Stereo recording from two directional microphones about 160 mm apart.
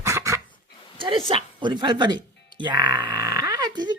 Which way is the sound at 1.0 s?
30° right (ahead or behind).